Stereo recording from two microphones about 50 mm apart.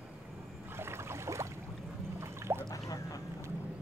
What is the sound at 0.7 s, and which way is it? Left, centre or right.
Boat, right.